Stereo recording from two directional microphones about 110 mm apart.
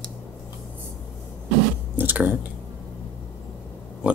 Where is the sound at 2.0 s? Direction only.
15° right (ahead or behind).